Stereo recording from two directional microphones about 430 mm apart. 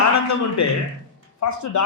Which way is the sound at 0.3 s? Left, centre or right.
Left.